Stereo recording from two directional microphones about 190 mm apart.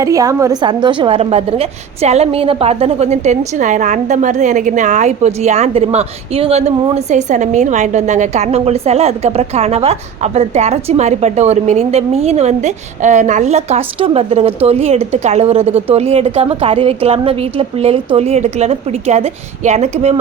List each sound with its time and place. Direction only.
0.0 s a woman's voice: 15° right (ahead or behind); by 20.1 s 35° right (ahead or behind)